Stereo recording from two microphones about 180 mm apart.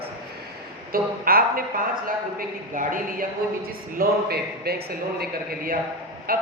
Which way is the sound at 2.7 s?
50° right (ahead or behind).